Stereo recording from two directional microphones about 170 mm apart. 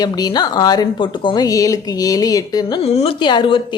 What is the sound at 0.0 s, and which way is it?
Speech, 25° left (ahead or behind).